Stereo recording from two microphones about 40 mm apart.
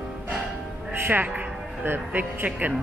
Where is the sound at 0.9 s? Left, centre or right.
Right.